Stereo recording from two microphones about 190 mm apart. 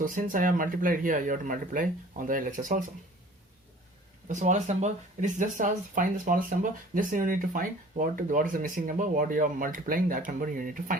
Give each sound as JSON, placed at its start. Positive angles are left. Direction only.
{"t": 0.0, "sound": "speech", "side_deg": -45}
{"t": 4.3, "sound": "speech", "side_deg": -40}